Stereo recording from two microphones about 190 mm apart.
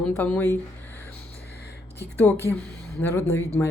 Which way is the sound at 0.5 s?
10° left (ahead or behind).